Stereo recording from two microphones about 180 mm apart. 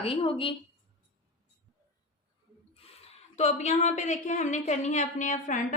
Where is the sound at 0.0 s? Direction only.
30° left (ahead or behind).